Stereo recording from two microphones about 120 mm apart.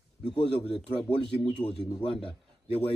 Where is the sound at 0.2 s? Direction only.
50° left (ahead or behind).